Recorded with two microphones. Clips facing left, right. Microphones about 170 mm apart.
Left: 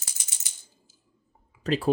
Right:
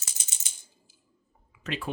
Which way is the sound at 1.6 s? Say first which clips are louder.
Left 8 dB; 35° left (ahead or behind).